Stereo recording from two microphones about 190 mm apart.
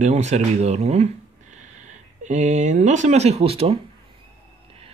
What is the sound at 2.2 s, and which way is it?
Speech, 40° right (ahead or behind).